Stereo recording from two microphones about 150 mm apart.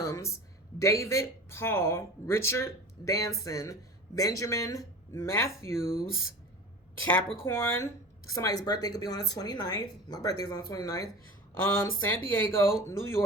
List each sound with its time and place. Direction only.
0.0 s a sound: 20° left (ahead or behind)
0.8 s speech: 20° left (ahead or behind)
7.4 s speech: 20° left (ahead or behind)